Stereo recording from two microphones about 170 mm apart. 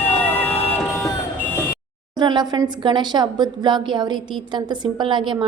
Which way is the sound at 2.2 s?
25° right (ahead or behind).